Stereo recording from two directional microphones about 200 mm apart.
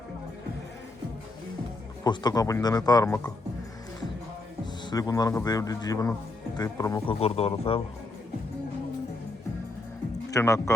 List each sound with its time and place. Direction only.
2.0 s speech: 20° left (ahead or behind)
4.6 s speech: 20° left (ahead or behind)
7.1 s speech: 30° left (ahead or behind)
10.2 s speech: 15° left (ahead or behind)